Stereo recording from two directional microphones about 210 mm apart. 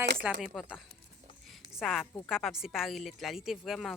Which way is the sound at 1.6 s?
Centre (ahead or behind).